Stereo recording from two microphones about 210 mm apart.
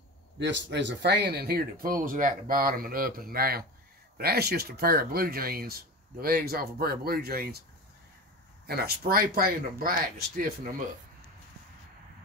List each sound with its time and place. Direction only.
0.4 s speech: 60° right (ahead or behind)
8.6 s speech: 50° right (ahead or behind)